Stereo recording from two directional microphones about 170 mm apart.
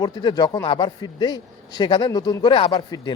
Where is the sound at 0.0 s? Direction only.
25° left (ahead or behind).